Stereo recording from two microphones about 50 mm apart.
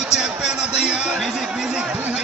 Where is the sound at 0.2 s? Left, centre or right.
Centre.